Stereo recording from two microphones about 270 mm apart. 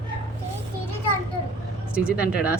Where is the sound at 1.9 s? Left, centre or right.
Centre.